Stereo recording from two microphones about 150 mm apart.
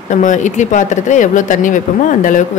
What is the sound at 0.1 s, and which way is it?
Speech, 55° left (ahead or behind).